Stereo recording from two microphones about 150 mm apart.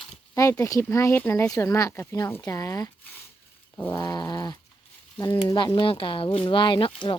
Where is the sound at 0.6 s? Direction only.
20° left (ahead or behind).